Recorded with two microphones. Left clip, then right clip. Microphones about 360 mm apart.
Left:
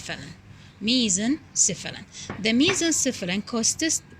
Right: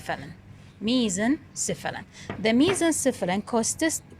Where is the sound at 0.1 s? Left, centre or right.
Centre.